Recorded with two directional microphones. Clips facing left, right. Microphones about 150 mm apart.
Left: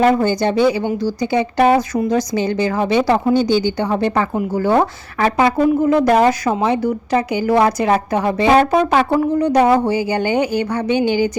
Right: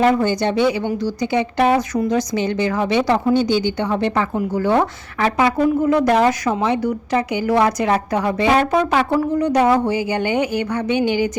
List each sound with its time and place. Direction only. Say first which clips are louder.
0.0 s speech: left 2 dB; 35° left (ahead or behind)